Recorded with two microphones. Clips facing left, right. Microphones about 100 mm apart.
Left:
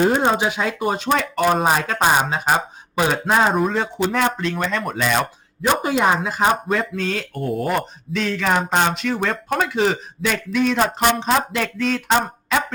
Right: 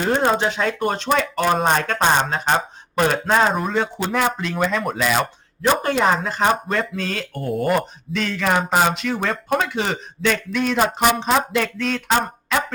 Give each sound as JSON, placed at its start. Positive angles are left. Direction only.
{"t": 0.0, "sound": "speech", "side_deg": 15}